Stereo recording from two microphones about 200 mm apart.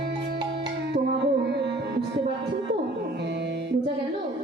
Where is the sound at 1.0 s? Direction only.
55° right (ahead or behind).